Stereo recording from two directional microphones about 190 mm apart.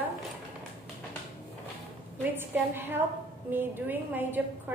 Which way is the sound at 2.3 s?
10° right (ahead or behind).